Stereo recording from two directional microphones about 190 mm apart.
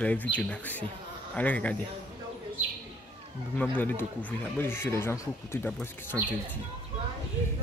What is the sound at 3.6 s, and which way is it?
Speech, 10° left (ahead or behind).